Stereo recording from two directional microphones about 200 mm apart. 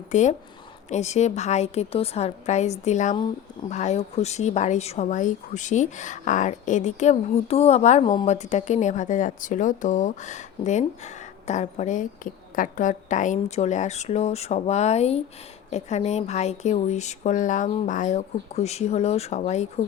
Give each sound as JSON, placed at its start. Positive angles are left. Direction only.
{"t": 0.1, "sound": "speech", "side_deg": 35}